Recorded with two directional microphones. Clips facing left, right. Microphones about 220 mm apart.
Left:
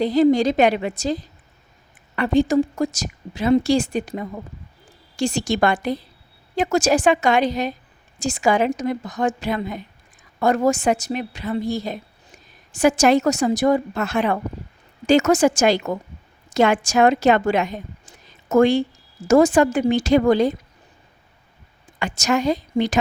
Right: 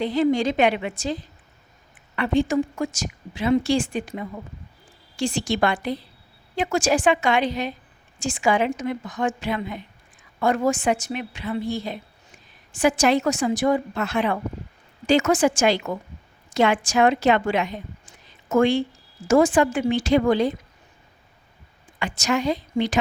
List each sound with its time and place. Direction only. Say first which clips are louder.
0.0 s a woman's voice: left 5 dB; 40° left (ahead or behind)
21.9 s a woman's voice: left 3 dB; 45° left (ahead or behind)